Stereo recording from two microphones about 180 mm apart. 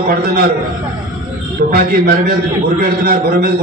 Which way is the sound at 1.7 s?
55° right (ahead or behind).